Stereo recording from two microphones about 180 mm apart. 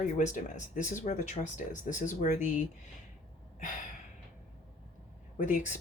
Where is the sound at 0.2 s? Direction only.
40° left (ahead or behind).